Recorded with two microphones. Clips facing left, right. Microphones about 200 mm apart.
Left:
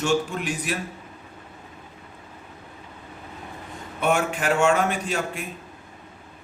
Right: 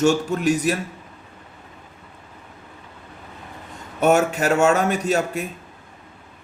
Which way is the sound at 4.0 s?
40° right (ahead or behind).